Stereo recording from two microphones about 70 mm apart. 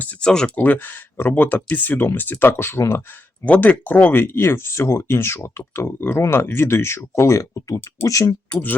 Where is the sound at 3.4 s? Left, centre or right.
Left.